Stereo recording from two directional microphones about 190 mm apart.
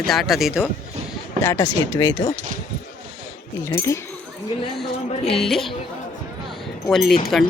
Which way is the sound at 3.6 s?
15° left (ahead or behind).